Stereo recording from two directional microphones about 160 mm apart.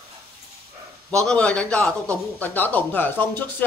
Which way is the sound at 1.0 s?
5° left (ahead or behind).